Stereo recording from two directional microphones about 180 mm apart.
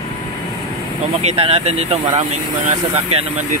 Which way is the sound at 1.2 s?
35° right (ahead or behind).